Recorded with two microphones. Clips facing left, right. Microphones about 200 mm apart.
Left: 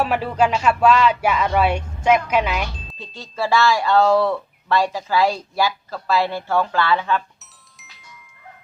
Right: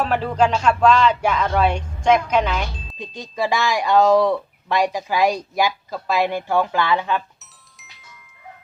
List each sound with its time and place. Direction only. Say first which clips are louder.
0.0 s speech: even; 5° left (ahead or behind)
3.0 s speech: right 2 dB; 15° right (ahead or behind)